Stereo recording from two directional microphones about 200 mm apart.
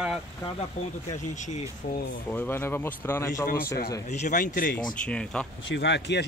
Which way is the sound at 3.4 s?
50° left (ahead or behind).